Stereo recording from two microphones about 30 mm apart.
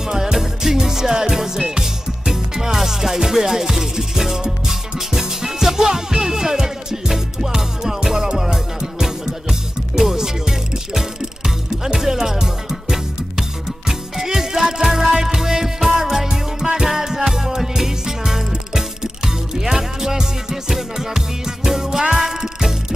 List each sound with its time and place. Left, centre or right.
0.1 s music: centre